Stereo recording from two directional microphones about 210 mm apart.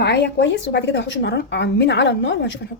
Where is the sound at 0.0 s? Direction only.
55° left (ahead or behind).